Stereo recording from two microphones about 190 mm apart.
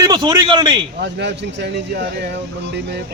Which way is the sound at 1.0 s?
65° right (ahead or behind).